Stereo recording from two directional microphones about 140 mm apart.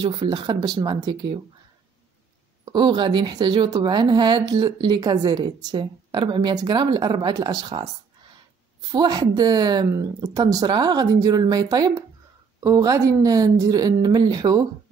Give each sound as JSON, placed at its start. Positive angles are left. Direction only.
{"t": 0.0, "sound": "a woman's voice", "side_deg": -35}
{"t": 2.6, "sound": "a woman's voice", "side_deg": -35}
{"t": 8.9, "sound": "speech", "side_deg": -30}